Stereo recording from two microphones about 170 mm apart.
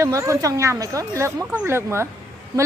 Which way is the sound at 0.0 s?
20° right (ahead or behind).